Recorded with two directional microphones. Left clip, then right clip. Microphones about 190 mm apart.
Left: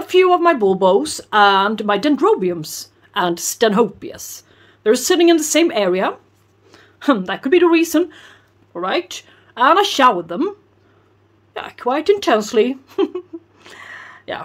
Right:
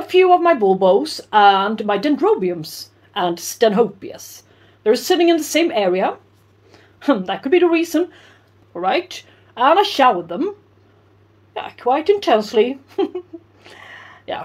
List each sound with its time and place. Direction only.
0.0 s speech: 25° left (ahead or behind)
11.5 s speech: 25° left (ahead or behind)